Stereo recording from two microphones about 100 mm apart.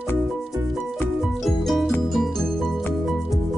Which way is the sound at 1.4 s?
Centre (ahead or behind).